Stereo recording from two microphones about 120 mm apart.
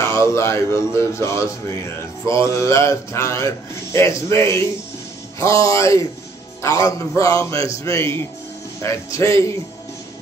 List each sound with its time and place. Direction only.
0.1 s a man's voice: 25° left (ahead or behind)